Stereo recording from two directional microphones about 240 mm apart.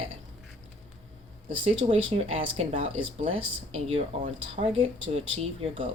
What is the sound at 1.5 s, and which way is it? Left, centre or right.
Speech, right.